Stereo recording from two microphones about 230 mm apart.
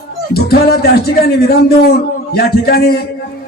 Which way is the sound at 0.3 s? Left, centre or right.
Left.